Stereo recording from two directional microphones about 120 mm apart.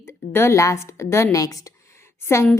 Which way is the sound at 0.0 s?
20° left (ahead or behind).